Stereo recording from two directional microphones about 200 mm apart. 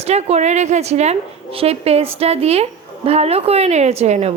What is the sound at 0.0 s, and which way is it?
A woman's voice, 30° right (ahead or behind).